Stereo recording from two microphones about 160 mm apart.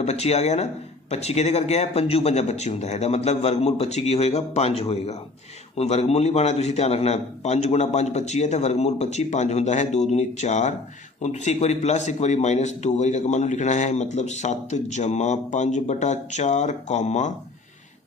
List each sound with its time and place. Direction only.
0.0 s a man's voice: 40° left (ahead or behind)